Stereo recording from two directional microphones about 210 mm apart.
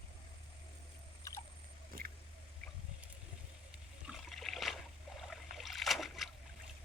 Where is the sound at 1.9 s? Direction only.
45° right (ahead or behind).